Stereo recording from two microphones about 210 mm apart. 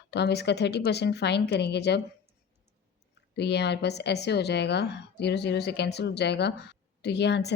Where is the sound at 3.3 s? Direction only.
55° left (ahead or behind).